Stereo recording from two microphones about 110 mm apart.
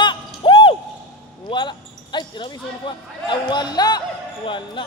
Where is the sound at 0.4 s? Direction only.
50° left (ahead or behind).